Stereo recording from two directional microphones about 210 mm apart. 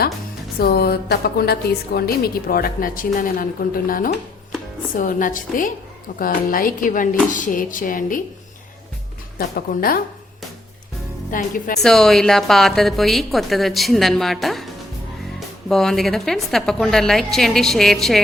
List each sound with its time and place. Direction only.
0.6 s a woman's voice: 50° left (ahead or behind)
9.4 s a woman's voice: 45° left (ahead or behind)
11.3 s speech: 40° left (ahead or behind)
11.8 s a woman's voice: centre (ahead or behind)